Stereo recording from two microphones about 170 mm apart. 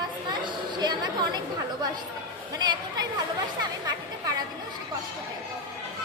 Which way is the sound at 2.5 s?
25° right (ahead or behind).